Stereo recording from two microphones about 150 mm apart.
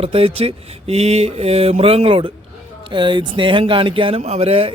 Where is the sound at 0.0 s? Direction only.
40° right (ahead or behind).